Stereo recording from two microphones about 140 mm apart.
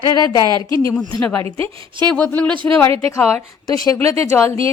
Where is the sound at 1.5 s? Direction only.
40° right (ahead or behind).